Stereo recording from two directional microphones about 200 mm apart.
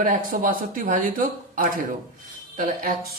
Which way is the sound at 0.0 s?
45° right (ahead or behind).